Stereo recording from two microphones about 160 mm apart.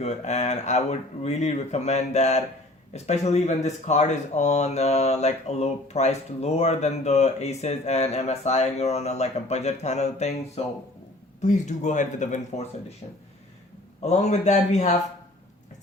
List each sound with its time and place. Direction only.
0.0 s speech: 45° left (ahead or behind)
14.0 s speech: 45° left (ahead or behind)